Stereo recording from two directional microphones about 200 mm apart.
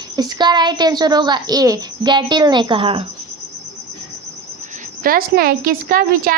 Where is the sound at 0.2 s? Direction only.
20° right (ahead or behind).